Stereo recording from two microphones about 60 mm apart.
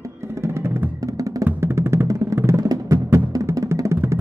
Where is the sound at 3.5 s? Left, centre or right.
Right.